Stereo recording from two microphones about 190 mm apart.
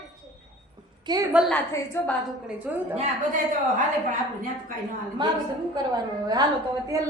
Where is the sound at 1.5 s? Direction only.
10° left (ahead or behind).